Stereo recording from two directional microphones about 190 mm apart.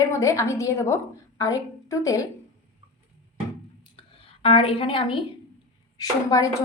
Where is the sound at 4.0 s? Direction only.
30° left (ahead or behind).